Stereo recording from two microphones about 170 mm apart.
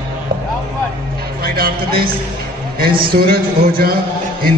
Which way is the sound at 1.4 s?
60° right (ahead or behind).